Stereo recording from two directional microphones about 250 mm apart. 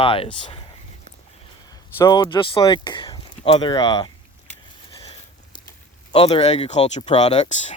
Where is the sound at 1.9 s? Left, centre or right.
Centre.